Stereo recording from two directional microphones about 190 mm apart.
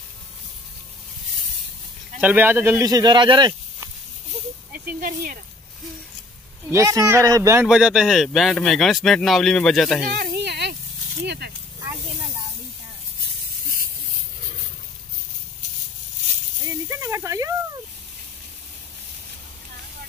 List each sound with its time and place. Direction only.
2.1 s speech: 10° right (ahead or behind)
4.7 s speech: 50° right (ahead or behind)
6.7 s speech: 15° right (ahead or behind)
7.6 s speech: 5° right (ahead or behind)
10.1 s a sound: 55° right (ahead or behind)
16.9 s snake: 15° right (ahead or behind)